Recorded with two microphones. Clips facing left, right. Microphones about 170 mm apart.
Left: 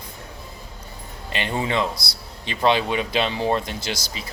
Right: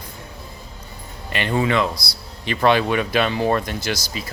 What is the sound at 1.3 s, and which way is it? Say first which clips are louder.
Speech: right 4 dB; 20° left (ahead or behind).